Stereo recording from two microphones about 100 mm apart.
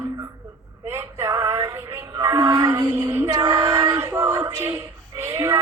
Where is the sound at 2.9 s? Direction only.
30° right (ahead or behind).